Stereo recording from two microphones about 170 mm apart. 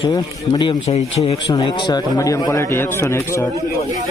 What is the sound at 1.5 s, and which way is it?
Speech, 25° left (ahead or behind).